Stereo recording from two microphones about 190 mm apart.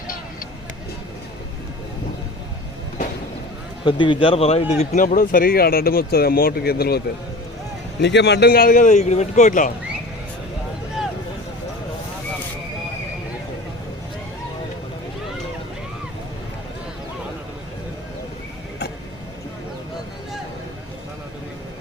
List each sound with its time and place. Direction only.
3.8 s a man's voice: 25° left (ahead or behind); by 7.0 s 55° left (ahead or behind)
8.0 s speech: 65° left (ahead or behind); by 9.7 s 45° left (ahead or behind)